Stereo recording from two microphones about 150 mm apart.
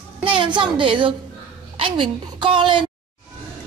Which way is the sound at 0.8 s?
35° right (ahead or behind).